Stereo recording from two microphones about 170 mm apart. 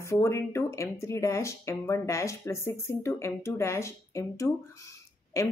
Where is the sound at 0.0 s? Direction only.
15° left (ahead or behind).